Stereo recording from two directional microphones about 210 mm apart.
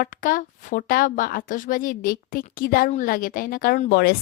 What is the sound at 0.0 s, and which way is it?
Speech, 40° left (ahead or behind).